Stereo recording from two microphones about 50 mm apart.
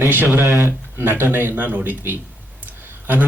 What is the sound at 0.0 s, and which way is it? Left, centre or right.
Speech, right.